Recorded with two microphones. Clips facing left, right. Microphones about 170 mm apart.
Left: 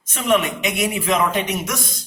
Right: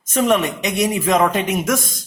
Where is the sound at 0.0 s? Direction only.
45° right (ahead or behind).